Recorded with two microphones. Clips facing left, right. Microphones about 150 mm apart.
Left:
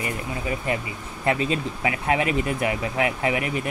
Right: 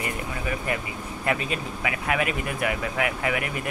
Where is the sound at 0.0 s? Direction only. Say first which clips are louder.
Left 1 dB; 25° left (ahead or behind).